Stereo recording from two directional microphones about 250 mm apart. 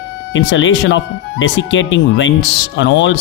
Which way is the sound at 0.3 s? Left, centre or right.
Left.